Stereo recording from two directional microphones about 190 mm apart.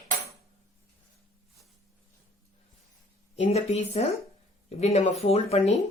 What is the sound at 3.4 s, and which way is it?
Speech, 35° left (ahead or behind).